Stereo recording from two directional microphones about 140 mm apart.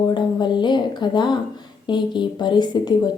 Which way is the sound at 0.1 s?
30° left (ahead or behind).